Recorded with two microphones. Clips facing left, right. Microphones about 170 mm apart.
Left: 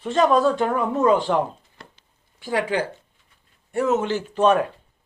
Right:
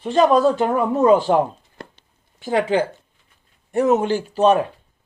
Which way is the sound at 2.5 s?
25° right (ahead or behind).